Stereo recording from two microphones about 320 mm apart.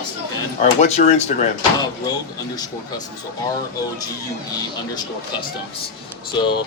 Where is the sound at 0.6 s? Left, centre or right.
Left.